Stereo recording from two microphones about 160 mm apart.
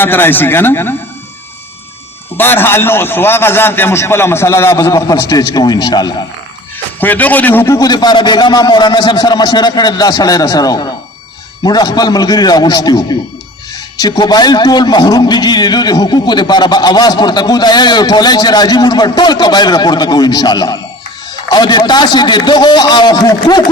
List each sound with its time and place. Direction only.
0.0 s a man's voice: 15° left (ahead or behind)
2.4 s a man's voice: 15° left (ahead or behind)
7.0 s a man's voice: 10° left (ahead or behind); by 23.6 s 25° left (ahead or behind)